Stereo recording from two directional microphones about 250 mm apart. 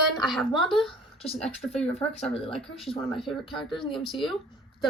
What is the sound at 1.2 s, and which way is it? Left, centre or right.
Speech, left.